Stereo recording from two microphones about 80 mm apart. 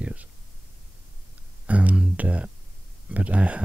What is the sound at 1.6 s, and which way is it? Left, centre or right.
Speech, centre.